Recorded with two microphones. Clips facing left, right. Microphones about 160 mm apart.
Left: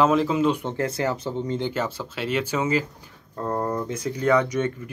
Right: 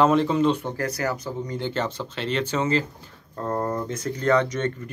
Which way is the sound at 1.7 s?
10° left (ahead or behind).